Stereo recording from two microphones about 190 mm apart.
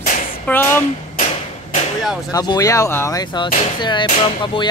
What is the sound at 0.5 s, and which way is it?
Speech, 10° left (ahead or behind).